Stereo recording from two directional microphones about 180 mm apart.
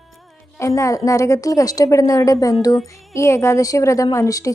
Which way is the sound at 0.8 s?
15° left (ahead or behind).